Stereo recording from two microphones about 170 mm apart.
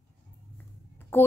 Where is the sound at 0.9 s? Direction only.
15° left (ahead or behind).